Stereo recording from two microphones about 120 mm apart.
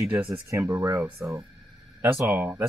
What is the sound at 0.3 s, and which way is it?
Speech, 25° right (ahead or behind).